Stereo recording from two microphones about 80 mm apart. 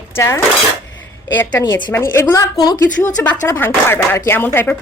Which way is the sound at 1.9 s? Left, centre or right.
Left.